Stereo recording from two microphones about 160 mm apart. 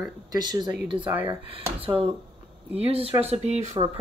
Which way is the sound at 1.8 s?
35° right (ahead or behind).